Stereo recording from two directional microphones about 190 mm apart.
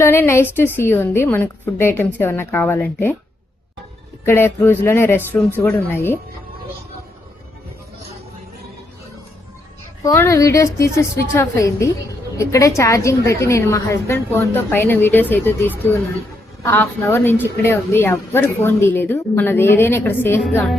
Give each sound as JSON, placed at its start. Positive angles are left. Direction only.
{"t": 0.0, "sound": "a woman's voice", "side_deg": 10}
{"t": 4.3, "sound": "a woman's voice", "side_deg": 10}
{"t": 10.0, "sound": "a woman's voice", "side_deg": 15}